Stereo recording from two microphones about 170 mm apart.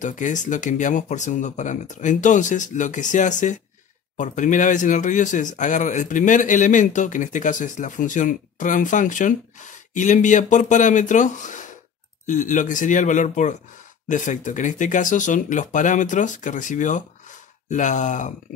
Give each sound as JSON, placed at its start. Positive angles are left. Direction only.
{"t": 0.0, "sound": "speech", "side_deg": 45}